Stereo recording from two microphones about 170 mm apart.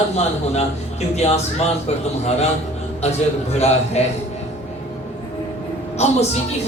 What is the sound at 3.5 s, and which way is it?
Speech, 40° left (ahead or behind).